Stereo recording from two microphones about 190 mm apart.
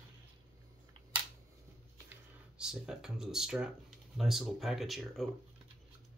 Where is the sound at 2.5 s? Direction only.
5° right (ahead or behind).